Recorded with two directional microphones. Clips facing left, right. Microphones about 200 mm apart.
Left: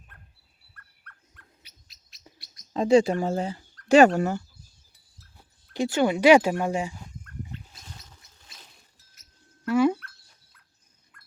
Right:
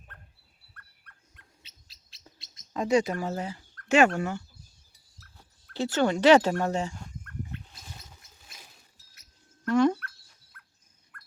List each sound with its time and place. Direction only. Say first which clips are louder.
0.1 s dog: right 1 dB; 10° left (ahead or behind)
1.0 s dog: left 3 dB; 20° right (ahead or behind)
1.9 s bird: even; 30° right (ahead or behind)
2.7 s speech: left 5 dB; 30° left (ahead or behind)
5.7 s speech: left 2 dB; 15° left (ahead or behind)
7.9 s a sound: even; 10° right (ahead or behind)
9.6 s dog: left 1 dB; 10° left (ahead or behind)
11.1 s dog: right 6 dB; 60° right (ahead or behind)